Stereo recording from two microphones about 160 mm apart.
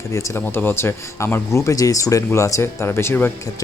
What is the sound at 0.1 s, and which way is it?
Speech, 20° left (ahead or behind).